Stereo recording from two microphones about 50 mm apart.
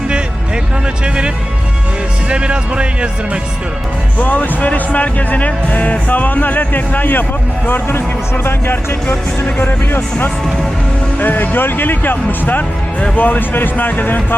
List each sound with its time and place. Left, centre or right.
1.0 s speech: right
2.3 s speech: right
4.2 s speech: left